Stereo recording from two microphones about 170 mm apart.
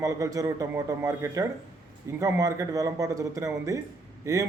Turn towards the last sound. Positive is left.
turn(degrees=-20)  # may be behind; listen again after turning